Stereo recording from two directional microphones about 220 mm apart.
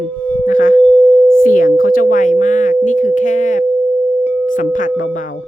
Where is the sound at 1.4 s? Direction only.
40° left (ahead or behind).